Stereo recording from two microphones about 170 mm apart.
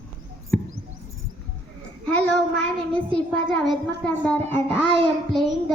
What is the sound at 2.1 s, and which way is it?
A woman's voice, 5° left (ahead or behind).